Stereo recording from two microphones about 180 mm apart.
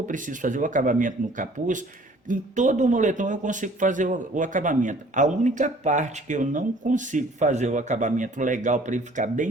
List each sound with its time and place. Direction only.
0.1 s a man's voice: 45° right (ahead or behind)